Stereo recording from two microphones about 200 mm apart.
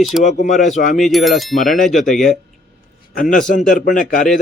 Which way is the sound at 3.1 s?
40° left (ahead or behind).